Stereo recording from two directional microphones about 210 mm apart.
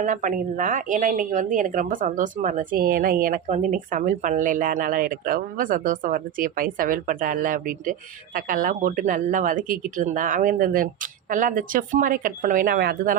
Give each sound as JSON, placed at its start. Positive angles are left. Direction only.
{"t": 0.0, "sound": "a woman's voice", "side_deg": -40}